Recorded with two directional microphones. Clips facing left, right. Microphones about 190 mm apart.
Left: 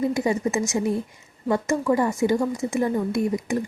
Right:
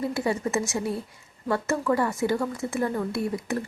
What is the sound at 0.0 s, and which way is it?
A woman's voice, 15° left (ahead or behind).